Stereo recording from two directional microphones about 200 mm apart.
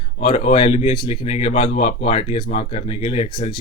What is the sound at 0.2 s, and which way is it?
Speech, 30° left (ahead or behind).